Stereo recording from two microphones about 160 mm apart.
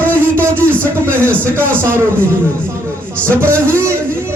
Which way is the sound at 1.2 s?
15° right (ahead or behind).